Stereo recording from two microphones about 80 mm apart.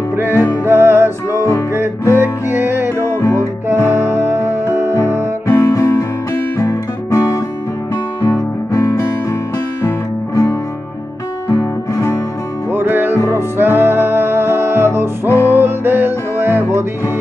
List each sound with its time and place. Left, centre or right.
0.1 s music: right
5.5 s music: left
12.7 s music: right
15.2 s music: left
15.6 s music: right